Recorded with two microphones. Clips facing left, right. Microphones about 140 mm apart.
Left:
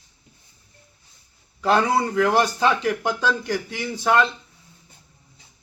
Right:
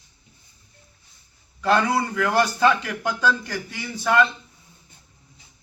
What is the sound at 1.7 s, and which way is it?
Speech, 25° left (ahead or behind).